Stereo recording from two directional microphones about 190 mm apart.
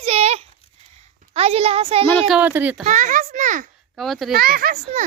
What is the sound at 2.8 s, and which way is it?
Speech, 40° right (ahead or behind).